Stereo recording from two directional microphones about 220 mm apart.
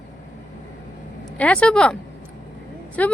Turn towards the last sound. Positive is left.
turn(degrees=5)  # may be behind; listen again after turning